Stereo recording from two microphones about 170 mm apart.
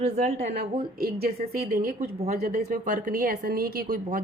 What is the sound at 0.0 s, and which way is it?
Speech, 40° right (ahead or behind).